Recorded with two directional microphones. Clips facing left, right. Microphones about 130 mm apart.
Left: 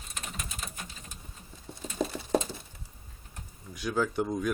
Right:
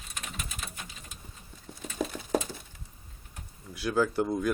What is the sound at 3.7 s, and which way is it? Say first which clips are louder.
Speech: right 2 dB; 5° right (ahead or behind).